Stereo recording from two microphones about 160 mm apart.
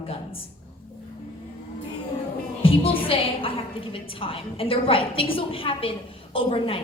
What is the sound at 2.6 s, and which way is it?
A woman's voice, 35° left (ahead or behind).